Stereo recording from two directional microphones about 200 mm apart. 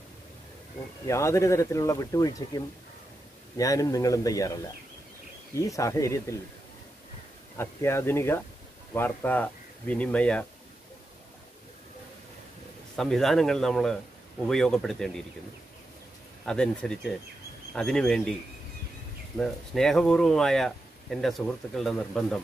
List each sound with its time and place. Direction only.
1.0 s speech: 15° left (ahead or behind)
5.6 s speech: 15° left (ahead or behind)
7.5 s speech: 10° left (ahead or behind)
12.9 s speech: centre (ahead or behind)
16.4 s speech: 5° left (ahead or behind)
19.3 s speech: centre (ahead or behind)